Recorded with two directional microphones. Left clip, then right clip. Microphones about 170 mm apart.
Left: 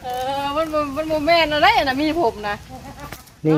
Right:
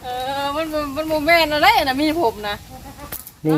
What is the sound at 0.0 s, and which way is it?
Speech, 60° right (ahead or behind).